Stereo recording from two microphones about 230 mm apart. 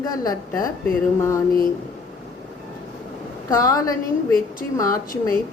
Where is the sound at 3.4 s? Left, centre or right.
Centre.